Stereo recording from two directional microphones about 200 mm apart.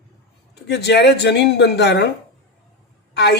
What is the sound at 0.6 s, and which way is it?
Speech, 55° left (ahead or behind).